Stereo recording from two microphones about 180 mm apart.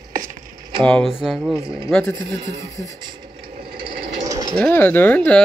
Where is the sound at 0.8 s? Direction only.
Centre (ahead or behind).